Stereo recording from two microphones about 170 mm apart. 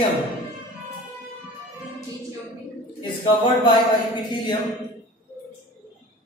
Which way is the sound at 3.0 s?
30° left (ahead or behind).